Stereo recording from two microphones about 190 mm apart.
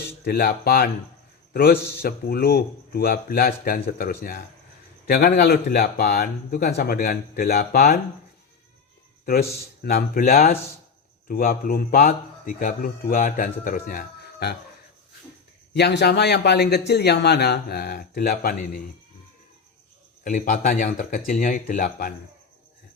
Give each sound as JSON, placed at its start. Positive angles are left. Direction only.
{"t": 0.3, "sound": "a man's voice", "side_deg": 55}
{"t": 9.2, "sound": "a man's voice", "side_deg": 55}
{"t": 15.7, "sound": "speech", "side_deg": 65}
{"t": 20.2, "sound": "a man's voice", "side_deg": 45}